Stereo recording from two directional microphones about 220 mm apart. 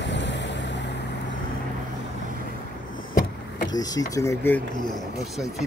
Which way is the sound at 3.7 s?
15° left (ahead or behind).